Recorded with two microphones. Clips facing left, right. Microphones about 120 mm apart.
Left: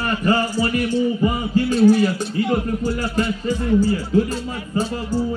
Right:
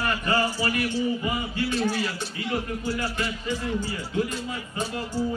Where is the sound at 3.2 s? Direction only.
35° left (ahead or behind).